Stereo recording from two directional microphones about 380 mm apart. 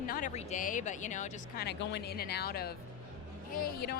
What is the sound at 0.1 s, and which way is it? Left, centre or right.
Speech, centre.